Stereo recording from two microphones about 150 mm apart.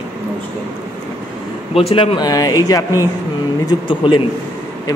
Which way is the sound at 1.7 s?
40° left (ahead or behind).